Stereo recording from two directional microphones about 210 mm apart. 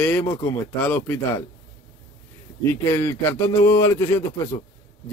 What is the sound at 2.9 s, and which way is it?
Speech, 10° left (ahead or behind).